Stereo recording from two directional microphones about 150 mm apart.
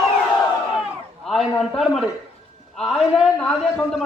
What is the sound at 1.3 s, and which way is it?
A man's voice, centre (ahead or behind).